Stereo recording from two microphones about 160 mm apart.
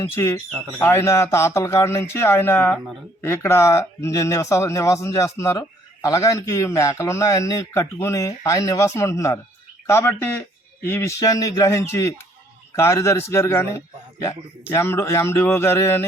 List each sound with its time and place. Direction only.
0.8 s a man's voice: 15° left (ahead or behind)